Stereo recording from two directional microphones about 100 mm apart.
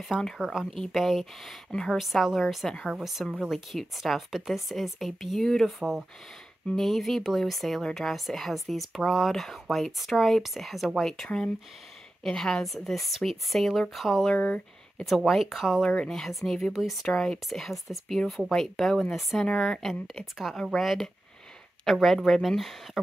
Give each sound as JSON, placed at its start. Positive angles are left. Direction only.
{"t": 0.1, "sound": "a woman's voice", "side_deg": 0}
{"t": 14.3, "sound": "speech", "side_deg": 10}
{"t": 15.0, "sound": "a woman's voice", "side_deg": 0}